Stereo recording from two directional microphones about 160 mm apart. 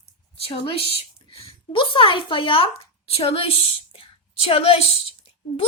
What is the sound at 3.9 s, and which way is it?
Whispering, 35° left (ahead or behind).